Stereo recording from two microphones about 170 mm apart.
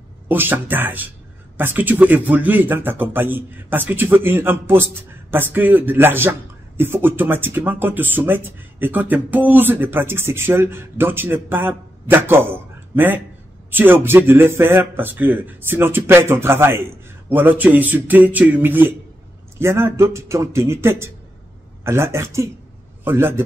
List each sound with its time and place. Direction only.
0.3 s speech: 10° right (ahead or behind)